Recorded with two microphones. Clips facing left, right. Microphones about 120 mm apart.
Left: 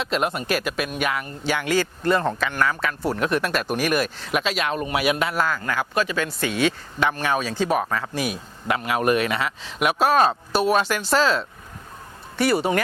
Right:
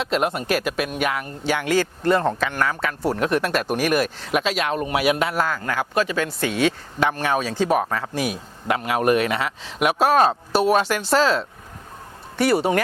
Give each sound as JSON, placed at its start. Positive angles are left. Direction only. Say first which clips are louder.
{"t": 0.0, "sound": "a man's voice", "louder": "right 2 dB", "side_deg": -55}